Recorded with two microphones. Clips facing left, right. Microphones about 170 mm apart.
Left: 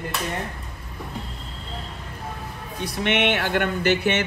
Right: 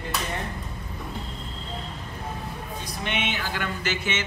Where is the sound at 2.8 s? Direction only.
70° left (ahead or behind).